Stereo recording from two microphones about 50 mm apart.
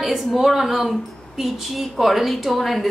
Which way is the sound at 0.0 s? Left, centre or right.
Centre.